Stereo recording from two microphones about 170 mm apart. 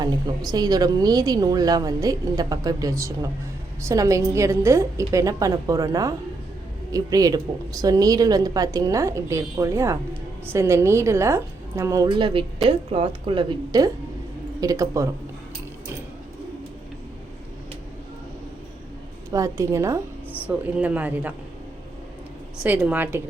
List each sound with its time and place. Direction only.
0.0 s a woman's voice: 25° right (ahead or behind)
19.3 s a woman's voice: 20° right (ahead or behind)
22.6 s a woman's voice: 10° right (ahead or behind)